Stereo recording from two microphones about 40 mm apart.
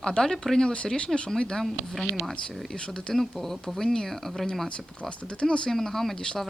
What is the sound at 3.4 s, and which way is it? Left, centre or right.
Speech, centre.